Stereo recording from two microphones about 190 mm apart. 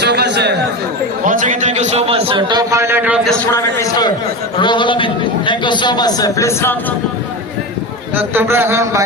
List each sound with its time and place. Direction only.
0.0 s chatter: 65° right (ahead or behind)
1.2 s a man's voice: 45° right (ahead or behind); by 3.2 s 10° right (ahead or behind)
3.5 s a man's voice: 15° left (ahead or behind)
8.1 s a man's voice: 10° right (ahead or behind)